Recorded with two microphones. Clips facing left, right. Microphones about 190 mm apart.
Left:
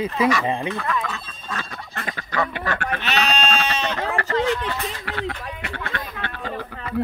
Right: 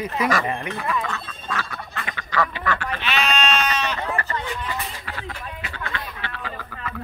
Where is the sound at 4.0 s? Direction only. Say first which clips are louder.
Left 5 dB; 90° left; by 6.5 s 55° left (ahead or behind).